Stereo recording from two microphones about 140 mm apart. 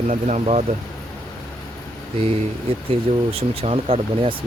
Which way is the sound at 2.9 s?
45° right (ahead or behind).